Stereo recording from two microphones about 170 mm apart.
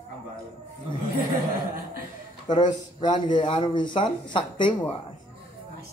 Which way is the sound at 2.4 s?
25° left (ahead or behind).